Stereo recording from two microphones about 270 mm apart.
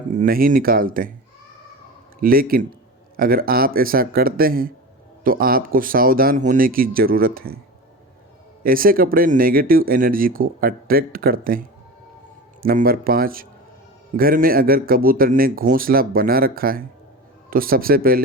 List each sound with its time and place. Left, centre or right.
0.1 s speech: right
2.2 s speech: right
8.6 s speech: right
12.6 s speech: right